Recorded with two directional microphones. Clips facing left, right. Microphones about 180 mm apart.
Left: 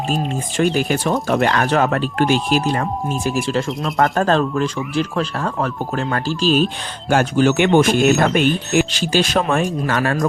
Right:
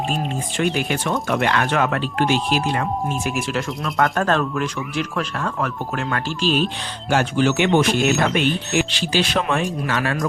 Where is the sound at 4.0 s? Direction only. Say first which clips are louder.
Left 3 dB; 35° left (ahead or behind).